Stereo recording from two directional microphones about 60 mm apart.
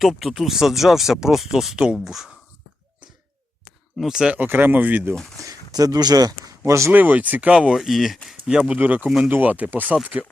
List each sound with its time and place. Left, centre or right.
0.0 s speech: centre
3.9 s speech: centre
4.4 s speech: right
5.4 s speech: right
6.7 s speech: right
6.9 s speech: right
7.5 s speech: centre
8.4 s speech: centre
8.8 s speech: right
9.0 s speech: centre
9.3 s speech: right